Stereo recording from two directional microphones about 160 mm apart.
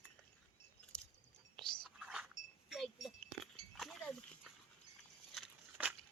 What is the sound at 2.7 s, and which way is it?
Chink, centre (ahead or behind).